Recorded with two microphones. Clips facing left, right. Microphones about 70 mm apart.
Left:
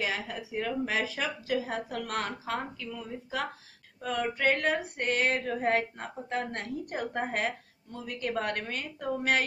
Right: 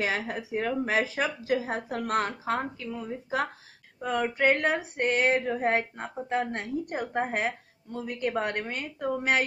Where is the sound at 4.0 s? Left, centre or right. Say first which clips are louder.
Right 3 dB; right.